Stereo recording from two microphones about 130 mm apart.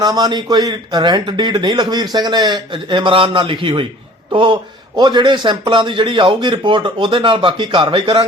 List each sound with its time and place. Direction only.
0.0 s speech: 30° right (ahead or behind)